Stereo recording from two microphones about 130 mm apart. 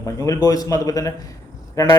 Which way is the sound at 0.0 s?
25° left (ahead or behind).